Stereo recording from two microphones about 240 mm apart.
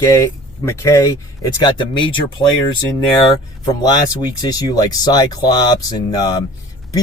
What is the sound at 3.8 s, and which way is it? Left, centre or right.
Speech, centre.